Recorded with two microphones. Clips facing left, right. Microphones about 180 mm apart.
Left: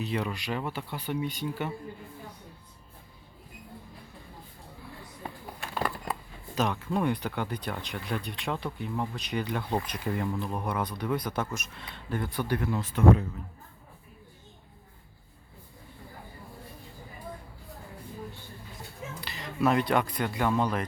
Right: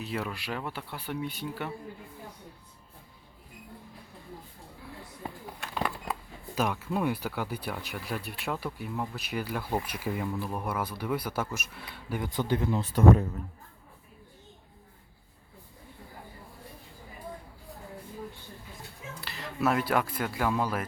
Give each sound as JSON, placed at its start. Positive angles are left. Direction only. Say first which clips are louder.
{"t": 0.0, "sound": "speech", "louder": "left 3 dB", "side_deg": 0}
{"t": 5.5, "sound": "bird", "louder": "left 1 dB", "side_deg": 0}
{"t": 6.6, "sound": "speech", "louder": "left 1 dB", "side_deg": -5}
{"t": 12.9, "sound": "speech", "louder": "right 1 dB", "side_deg": -40}
{"t": 19.2, "sound": "speech", "louder": "left 2 dB", "side_deg": 0}